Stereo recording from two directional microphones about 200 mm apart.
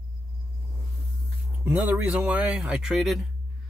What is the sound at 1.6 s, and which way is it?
Speech, 5° right (ahead or behind).